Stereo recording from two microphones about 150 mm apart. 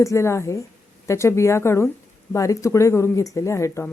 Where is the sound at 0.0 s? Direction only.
20° left (ahead or behind).